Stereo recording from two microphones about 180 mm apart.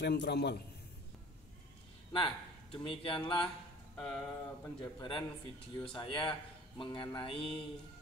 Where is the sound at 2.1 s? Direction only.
30° left (ahead or behind).